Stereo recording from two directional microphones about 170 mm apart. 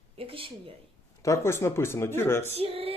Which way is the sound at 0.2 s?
30° right (ahead or behind).